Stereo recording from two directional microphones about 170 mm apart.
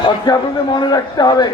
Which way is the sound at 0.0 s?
25° left (ahead or behind).